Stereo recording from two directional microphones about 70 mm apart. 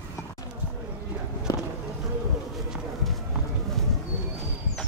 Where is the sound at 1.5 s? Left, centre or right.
Left.